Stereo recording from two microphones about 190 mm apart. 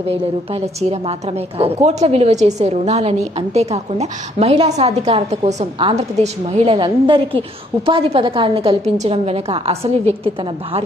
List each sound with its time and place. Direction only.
0.1 s a woman's voice: 35° right (ahead or behind)